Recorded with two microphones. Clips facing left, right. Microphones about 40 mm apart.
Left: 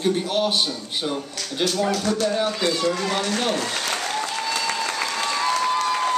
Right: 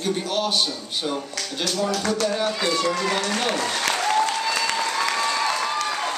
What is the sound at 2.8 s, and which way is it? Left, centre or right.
Speech, right.